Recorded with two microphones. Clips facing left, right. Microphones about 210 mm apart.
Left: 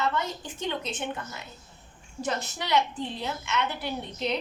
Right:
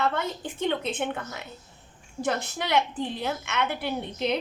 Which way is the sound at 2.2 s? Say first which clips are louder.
Right 3 dB; 55° right (ahead or behind).